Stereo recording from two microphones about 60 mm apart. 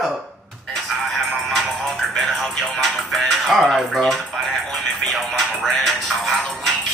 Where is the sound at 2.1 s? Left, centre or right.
Centre.